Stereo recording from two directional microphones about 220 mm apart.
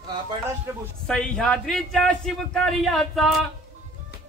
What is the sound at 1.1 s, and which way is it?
A man's voice, 5° left (ahead or behind).